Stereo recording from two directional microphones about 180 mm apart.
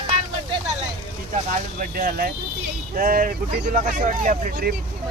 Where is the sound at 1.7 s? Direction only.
55° right (ahead or behind).